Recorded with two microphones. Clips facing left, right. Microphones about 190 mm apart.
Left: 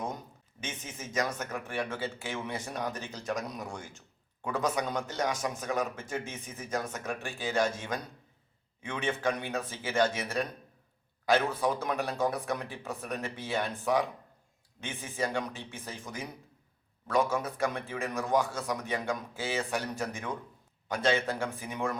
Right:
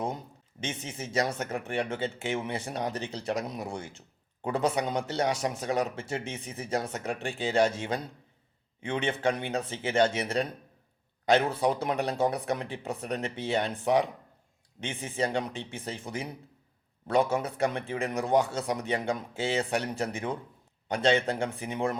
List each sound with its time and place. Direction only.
0.7 s a man's voice: 30° right (ahead or behind)
11.4 s a man's voice: 30° right (ahead or behind)